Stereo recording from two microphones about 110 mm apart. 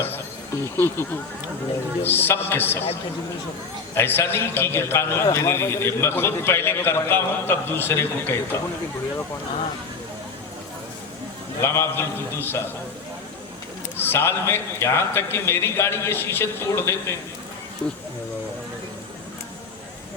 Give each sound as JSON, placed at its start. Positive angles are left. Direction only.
{"t": 0.6, "sound": "a man's voice", "side_deg": 25}
{"t": 3.9, "sound": "a man's voice", "side_deg": 20}
{"t": 11.6, "sound": "a man's voice", "side_deg": 25}
{"t": 13.9, "sound": "a man's voice", "side_deg": 20}